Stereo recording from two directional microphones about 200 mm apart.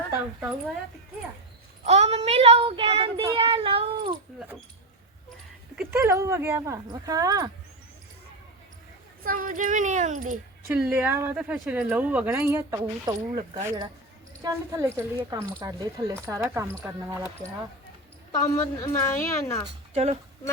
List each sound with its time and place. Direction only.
1.8 s child singing: 35° right (ahead or behind)
5.7 s speech: 10° right (ahead or behind)
9.2 s speech: 45° right (ahead or behind)
10.7 s speech: 10° right (ahead or behind)
18.3 s a woman's voice: 15° left (ahead or behind)
19.9 s speech: 30° right (ahead or behind)